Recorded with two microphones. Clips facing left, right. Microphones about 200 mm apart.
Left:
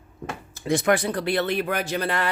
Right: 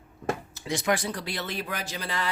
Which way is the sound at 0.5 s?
50° left (ahead or behind).